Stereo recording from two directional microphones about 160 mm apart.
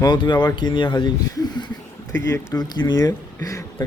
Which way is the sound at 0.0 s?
30° left (ahead or behind).